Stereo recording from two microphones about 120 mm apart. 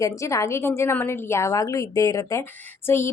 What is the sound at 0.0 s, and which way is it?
A woman's voice, 25° left (ahead or behind).